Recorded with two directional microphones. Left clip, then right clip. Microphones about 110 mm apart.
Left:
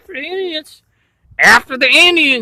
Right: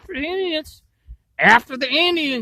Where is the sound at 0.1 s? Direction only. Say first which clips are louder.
Left 2 dB; 90° right.